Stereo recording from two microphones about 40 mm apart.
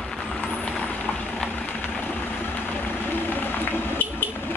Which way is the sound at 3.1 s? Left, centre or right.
Left.